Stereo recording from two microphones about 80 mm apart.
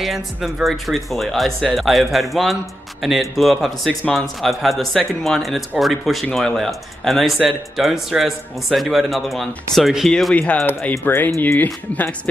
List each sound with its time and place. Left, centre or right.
0.0 s speech: centre
10.3 s speech: centre
10.9 s speech: left